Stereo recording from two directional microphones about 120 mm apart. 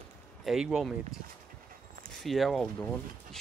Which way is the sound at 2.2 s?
Centre (ahead or behind).